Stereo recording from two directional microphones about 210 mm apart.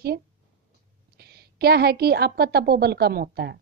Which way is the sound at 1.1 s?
50° right (ahead or behind).